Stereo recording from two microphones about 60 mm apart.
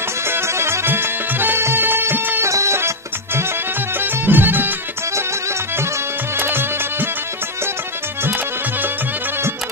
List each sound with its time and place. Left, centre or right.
0.3 s music: right
2.4 s music: right
4.0 s music: right
6.3 s music: right